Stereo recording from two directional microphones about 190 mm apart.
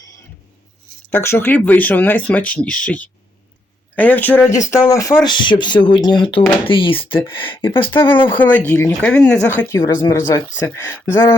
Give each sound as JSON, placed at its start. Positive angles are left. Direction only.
{"t": 1.1, "sound": "speech", "side_deg": 15}
{"t": 7.9, "sound": "speech", "side_deg": 10}